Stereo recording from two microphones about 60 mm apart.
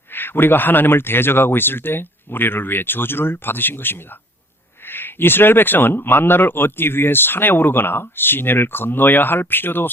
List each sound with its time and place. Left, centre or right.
0.1 s speech: left